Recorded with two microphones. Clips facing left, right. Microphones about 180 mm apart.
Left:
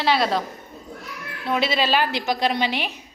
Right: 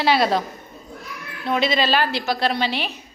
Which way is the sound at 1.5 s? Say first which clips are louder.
Right 1 dB; 5° left (ahead or behind).